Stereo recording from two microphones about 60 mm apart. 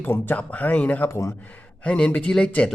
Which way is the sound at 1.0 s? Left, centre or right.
Left.